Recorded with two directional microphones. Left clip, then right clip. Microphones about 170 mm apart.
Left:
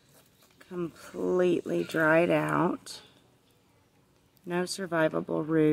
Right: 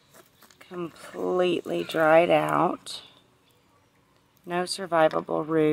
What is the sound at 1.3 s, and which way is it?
Speech, 40° left (ahead or behind).